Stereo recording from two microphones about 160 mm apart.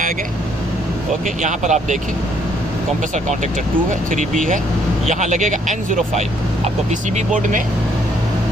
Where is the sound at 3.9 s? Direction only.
50° right (ahead or behind).